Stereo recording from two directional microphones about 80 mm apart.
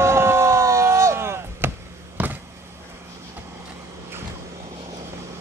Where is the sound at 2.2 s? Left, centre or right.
Centre.